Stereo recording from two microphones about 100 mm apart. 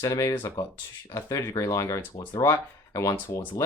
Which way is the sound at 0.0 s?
35° left (ahead or behind).